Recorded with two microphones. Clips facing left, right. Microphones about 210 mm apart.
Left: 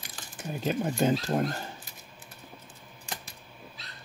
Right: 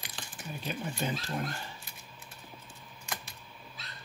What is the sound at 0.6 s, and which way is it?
Speech, 45° left (ahead or behind).